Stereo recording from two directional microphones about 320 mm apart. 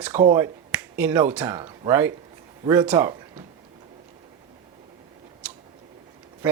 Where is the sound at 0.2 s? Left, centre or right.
Centre.